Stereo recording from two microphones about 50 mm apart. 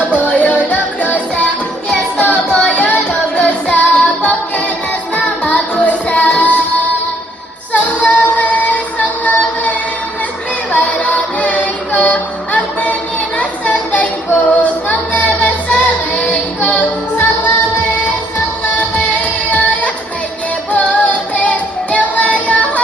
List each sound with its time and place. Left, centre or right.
0.3 s music: left
2.6 s music: left
7.7 s music: left
13.4 s child singing: left
15.7 s music: left
18.9 s music: left